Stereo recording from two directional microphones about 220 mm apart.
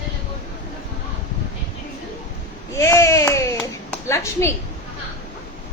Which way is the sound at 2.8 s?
15° left (ahead or behind).